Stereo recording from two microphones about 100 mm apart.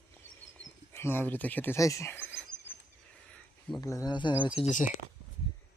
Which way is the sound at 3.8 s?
35° left (ahead or behind).